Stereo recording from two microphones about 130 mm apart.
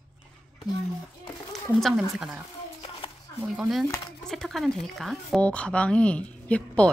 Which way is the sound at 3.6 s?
Centre (ahead or behind).